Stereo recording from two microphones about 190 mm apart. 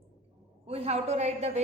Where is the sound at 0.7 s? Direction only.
30° right (ahead or behind).